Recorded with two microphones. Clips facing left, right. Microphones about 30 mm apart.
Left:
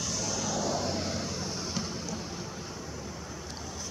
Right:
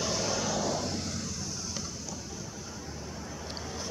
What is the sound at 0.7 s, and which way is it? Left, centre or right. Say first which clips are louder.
Vehicle: left 2 dB; centre.